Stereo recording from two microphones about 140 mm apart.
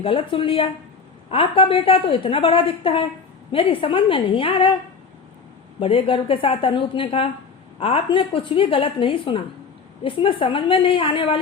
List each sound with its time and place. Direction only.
0.0 s a woman's voice: 40° left (ahead or behind)
5.8 s a woman's voice: 40° left (ahead or behind)